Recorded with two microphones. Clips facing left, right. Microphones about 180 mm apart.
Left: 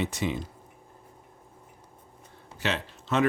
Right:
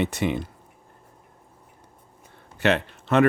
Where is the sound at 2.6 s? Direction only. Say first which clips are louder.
Right 9 dB; 60° right (ahead or behind).